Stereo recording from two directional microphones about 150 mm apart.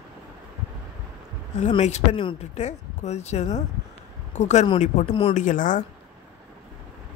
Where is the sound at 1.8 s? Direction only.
45° left (ahead or behind).